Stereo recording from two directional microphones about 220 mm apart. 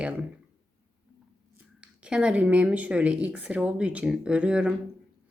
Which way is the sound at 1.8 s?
5° right (ahead or behind).